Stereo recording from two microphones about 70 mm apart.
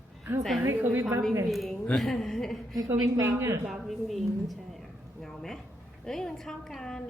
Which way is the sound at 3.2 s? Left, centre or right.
Right.